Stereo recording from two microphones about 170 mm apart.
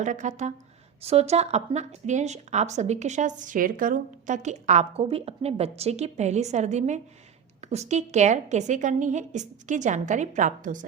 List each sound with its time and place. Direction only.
0.0 s a woman's voice: 45° right (ahead or behind)